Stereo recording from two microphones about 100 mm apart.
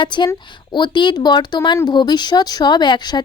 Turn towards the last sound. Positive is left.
turn(degrees=45)  # may be behind; listen again after turning